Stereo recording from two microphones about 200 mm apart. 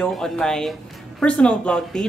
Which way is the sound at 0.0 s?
5° left (ahead or behind).